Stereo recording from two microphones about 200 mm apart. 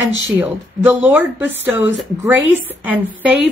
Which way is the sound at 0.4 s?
10° right (ahead or behind).